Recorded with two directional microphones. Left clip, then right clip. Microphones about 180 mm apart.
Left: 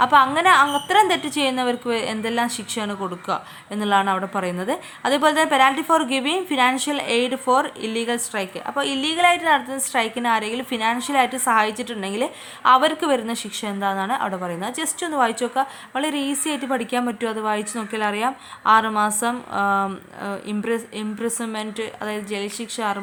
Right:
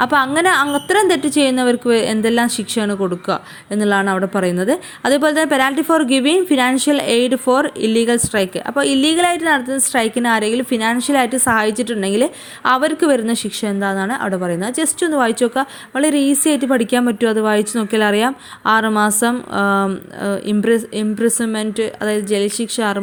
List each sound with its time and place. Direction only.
0.0 s a woman's voice: 25° right (ahead or behind)